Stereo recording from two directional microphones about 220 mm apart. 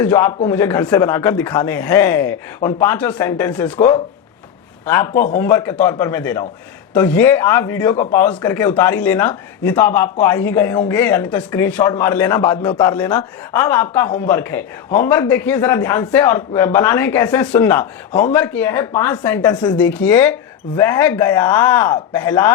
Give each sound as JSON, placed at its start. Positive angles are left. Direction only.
{"t": 0.0, "sound": "speech", "side_deg": 10}
{"t": 3.8, "sound": "speech", "side_deg": 30}
{"t": 4.9, "sound": "speech", "side_deg": 10}
{"t": 5.1, "sound": "speech", "side_deg": 35}
{"t": 5.4, "sound": "speech", "side_deg": 10}